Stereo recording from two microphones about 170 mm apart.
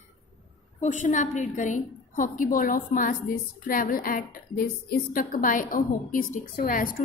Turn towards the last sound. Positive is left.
turn(degrees=55)  # may be behind; listen again after turning